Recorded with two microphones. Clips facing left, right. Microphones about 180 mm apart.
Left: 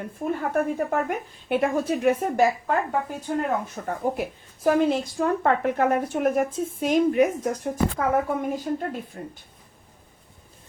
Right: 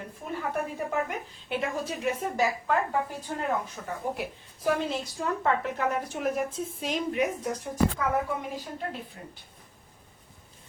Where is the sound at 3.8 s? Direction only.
55° left (ahead or behind).